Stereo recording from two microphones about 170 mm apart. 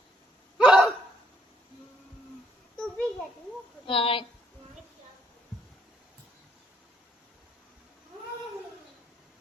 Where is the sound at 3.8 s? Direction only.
30° left (ahead or behind).